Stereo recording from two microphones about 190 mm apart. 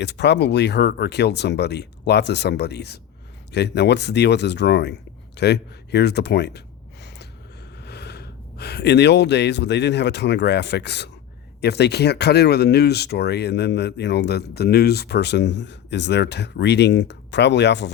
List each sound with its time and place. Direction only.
0.0 s speech: 65° left (ahead or behind)
7.8 s speech: 60° left (ahead or behind)